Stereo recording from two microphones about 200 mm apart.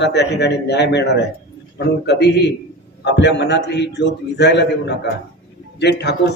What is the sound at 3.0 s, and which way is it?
A man's voice, 60° left (ahead or behind).